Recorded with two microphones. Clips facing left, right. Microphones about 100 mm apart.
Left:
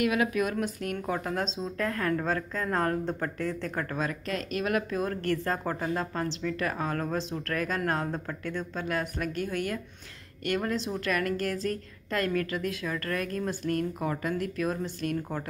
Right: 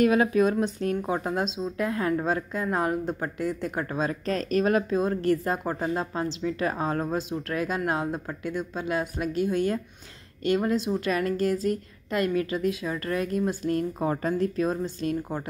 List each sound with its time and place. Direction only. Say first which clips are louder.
0.0 s a woman's voice: right 6 dB; 35° right (ahead or behind)